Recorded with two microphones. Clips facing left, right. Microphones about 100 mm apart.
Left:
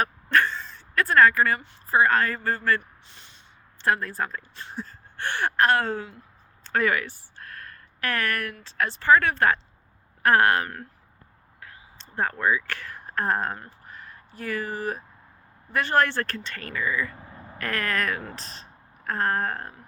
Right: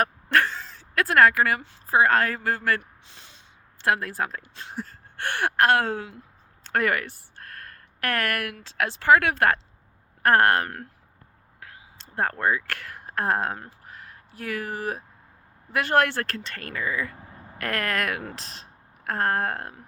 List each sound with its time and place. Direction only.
0.0 s speech: 75° right (ahead or behind)
2.6 s speech: 90° right; by 6.1 s 70° right (ahead or behind)
6.7 s speech: 55° right (ahead or behind)
10.2 s speech: 50° right (ahead or behind)
12.1 s speech: 55° right (ahead or behind); by 13.7 s 75° right (ahead or behind)
14.4 s speech: 65° right (ahead or behind)